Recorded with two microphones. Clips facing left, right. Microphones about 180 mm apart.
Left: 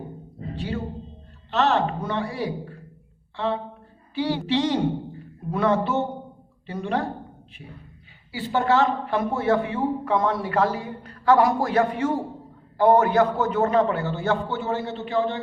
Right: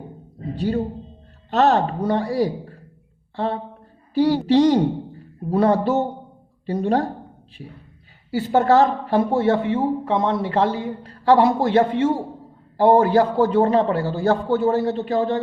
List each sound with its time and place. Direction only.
0.5 s a man's voice: 40° right (ahead or behind)
8.3 s a man's voice: 45° right (ahead or behind)